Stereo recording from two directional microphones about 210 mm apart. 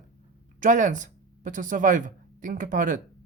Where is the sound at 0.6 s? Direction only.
35° right (ahead or behind).